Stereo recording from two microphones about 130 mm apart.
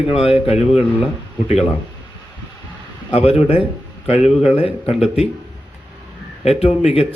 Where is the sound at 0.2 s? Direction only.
45° left (ahead or behind).